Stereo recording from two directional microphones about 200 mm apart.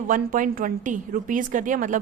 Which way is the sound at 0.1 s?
45° right (ahead or behind).